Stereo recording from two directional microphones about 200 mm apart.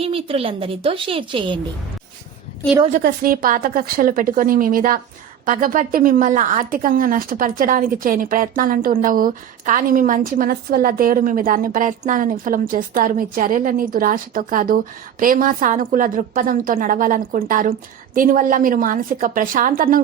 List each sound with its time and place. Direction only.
0.0 s a woman's voice: 30° right (ahead or behind)
3.0 s a woman's voice: 45° right (ahead or behind)